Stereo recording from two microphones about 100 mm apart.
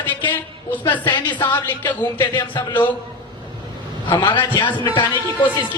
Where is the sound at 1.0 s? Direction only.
50° left (ahead or behind).